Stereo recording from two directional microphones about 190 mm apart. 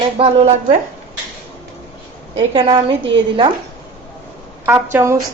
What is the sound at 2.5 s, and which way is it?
Speech, 25° right (ahead or behind).